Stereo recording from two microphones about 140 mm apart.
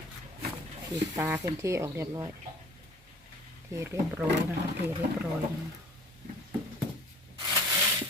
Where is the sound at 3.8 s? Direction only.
20° right (ahead or behind).